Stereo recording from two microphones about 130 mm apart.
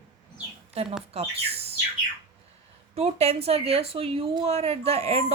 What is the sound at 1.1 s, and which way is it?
Speech, 50° right (ahead or behind).